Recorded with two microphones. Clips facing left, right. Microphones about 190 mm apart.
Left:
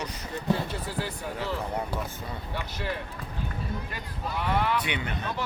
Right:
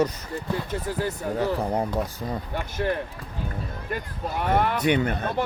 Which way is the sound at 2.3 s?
50° right (ahead or behind).